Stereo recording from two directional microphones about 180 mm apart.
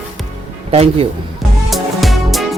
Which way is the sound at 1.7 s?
Centre (ahead or behind).